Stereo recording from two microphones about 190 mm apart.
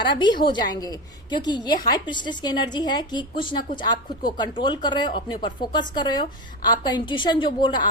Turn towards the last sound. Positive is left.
turn(degrees=25)  # may be behind; listen again after turning